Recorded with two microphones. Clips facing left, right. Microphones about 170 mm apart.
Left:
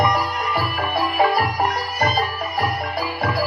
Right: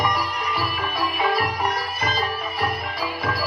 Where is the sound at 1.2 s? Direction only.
45° left (ahead or behind).